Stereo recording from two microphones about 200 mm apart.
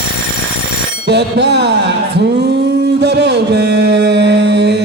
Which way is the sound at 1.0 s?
60° right (ahead or behind).